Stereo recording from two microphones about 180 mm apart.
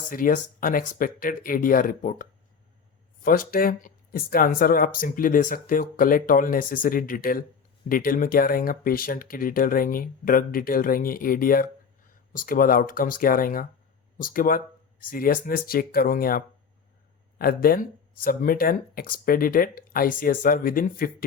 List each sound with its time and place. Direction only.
0.1 s speech: 50° left (ahead or behind)
3.2 s speech: 50° left (ahead or behind)